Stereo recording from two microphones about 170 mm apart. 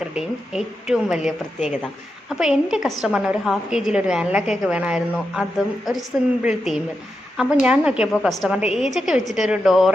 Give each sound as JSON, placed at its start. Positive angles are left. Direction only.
{"t": 0.1, "sound": "a woman's voice", "side_deg": -5}
{"t": 1.5, "sound": "speech", "side_deg": 45}
{"t": 2.4, "sound": "a woman's voice", "side_deg": -5}